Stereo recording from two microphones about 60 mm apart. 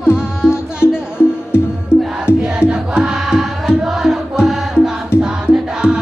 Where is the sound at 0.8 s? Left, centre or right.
Left.